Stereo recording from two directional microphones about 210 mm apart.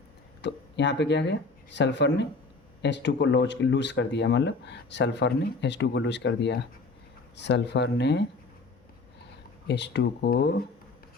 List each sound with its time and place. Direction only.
0.4 s speech: 55° left (ahead or behind)
9.6 s speech: 55° left (ahead or behind)